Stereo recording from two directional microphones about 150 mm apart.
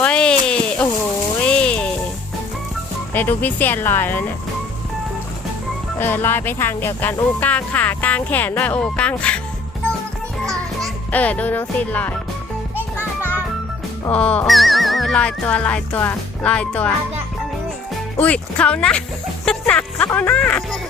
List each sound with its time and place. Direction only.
0.0 s a sound: 5° left (ahead or behind)
1.5 s music: 5° left (ahead or behind)
3.1 s speech: 15° left (ahead or behind)
6.0 s speech: 15° left (ahead or behind)
11.1 s speech: 10° left (ahead or behind)
13.0 s music: 15° right (ahead or behind)
14.1 s speech: 10° left (ahead or behind)
18.2 s speech: 10° left (ahead or behind)
19.5 s music: 10° left (ahead or behind)
20.1 s speech: 10° left (ahead or behind)